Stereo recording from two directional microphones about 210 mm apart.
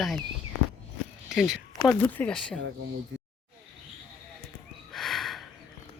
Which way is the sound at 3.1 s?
60° right (ahead or behind).